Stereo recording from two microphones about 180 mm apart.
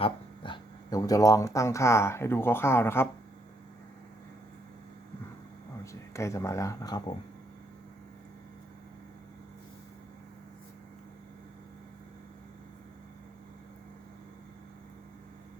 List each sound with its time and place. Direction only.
0.0 s speech: 25° left (ahead or behind)
5.8 s speech: 15° left (ahead or behind)